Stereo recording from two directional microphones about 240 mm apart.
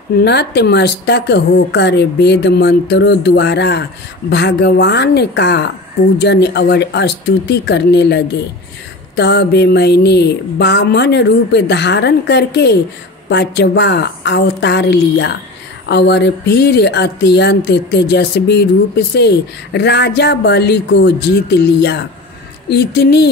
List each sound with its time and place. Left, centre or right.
0.2 s speech: left